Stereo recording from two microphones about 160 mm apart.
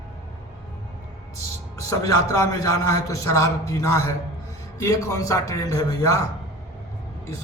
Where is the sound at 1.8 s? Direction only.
20° left (ahead or behind).